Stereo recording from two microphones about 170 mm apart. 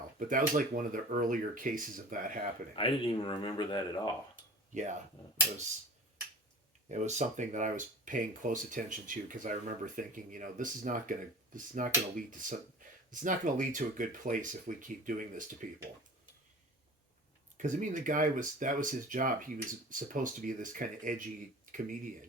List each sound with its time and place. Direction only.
0.3 s speech: 50° right (ahead or behind)
2.7 s speech: 30° left (ahead or behind)
4.7 s speech: 45° right (ahead or behind)
6.8 s speech: 45° right (ahead or behind)
17.6 s speech: 50° right (ahead or behind)